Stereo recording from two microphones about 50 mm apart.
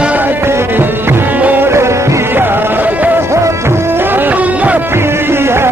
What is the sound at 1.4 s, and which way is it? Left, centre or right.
Music, right.